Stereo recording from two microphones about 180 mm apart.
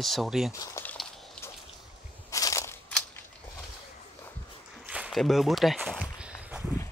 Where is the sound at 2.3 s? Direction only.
15° left (ahead or behind).